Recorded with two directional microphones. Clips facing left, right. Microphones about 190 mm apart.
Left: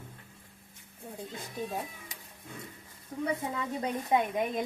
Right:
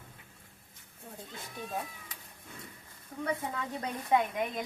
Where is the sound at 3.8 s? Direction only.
20° left (ahead or behind).